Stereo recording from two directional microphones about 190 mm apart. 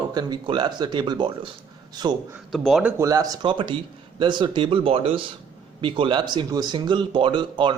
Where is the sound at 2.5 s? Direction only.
Centre (ahead or behind).